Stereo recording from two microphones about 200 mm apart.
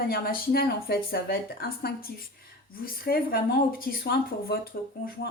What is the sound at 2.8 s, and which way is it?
A woman's voice, 50° left (ahead or behind).